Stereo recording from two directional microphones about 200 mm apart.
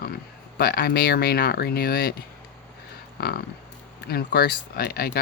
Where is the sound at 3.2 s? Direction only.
50° left (ahead or behind).